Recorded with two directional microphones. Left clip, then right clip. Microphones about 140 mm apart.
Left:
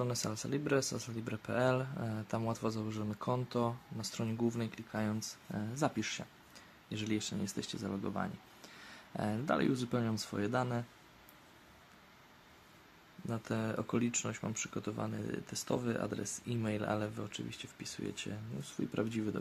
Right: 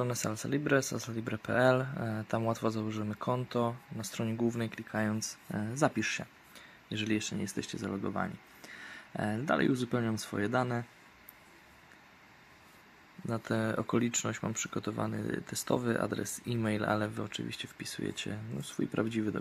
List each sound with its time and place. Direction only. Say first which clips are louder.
0.0 s speech: right 3 dB; 25° right (ahead or behind)
13.3 s speech: right 5 dB; 30° right (ahead or behind)